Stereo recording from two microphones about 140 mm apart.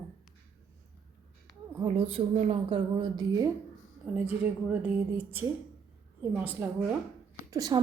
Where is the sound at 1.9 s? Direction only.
40° right (ahead or behind).